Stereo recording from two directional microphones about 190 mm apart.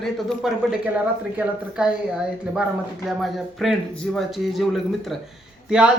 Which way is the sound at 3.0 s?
Centre (ahead or behind).